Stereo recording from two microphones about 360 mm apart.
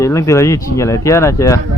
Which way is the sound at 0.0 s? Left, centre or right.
Centre.